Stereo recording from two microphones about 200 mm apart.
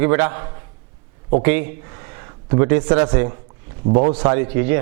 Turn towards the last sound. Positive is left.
turn(degrees=-15)  # may be behind; listen again after turning